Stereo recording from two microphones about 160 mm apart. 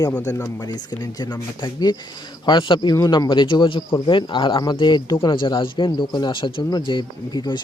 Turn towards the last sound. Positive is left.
turn(degrees=30)  # may be behind; listen again after turning